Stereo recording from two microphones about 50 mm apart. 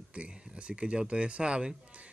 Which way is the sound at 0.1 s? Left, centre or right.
Right.